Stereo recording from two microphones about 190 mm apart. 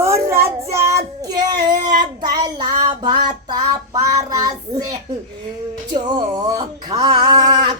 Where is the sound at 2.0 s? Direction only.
20° right (ahead or behind).